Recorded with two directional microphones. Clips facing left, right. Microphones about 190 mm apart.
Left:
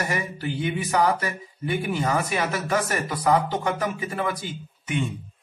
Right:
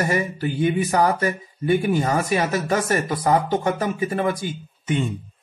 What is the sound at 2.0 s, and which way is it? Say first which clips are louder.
Speech: right 3 dB; 40° right (ahead or behind).